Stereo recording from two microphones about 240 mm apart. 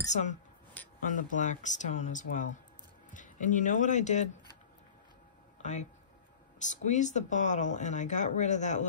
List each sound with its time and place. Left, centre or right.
0.1 s speech: left
5.6 s speech: left